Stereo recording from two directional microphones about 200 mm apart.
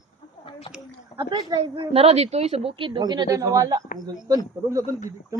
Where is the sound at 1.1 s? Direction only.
25° right (ahead or behind).